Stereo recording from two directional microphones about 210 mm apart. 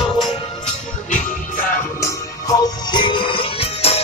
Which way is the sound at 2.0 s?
15° left (ahead or behind).